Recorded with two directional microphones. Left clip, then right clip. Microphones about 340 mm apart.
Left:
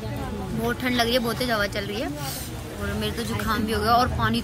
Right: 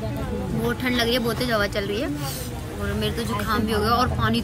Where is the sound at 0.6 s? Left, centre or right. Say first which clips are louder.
Even; centre.